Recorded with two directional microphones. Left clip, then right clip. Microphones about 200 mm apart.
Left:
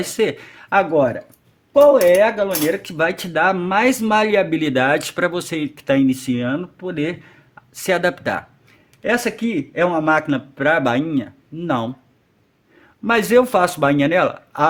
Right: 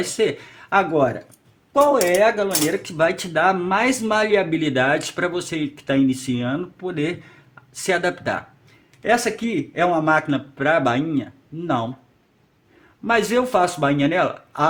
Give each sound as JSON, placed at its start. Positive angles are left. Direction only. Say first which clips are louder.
{"t": 0.0, "sound": "speech", "louder": "left 1 dB", "side_deg": 35}
{"t": 13.1, "sound": "speech", "louder": "left 4 dB", "side_deg": 40}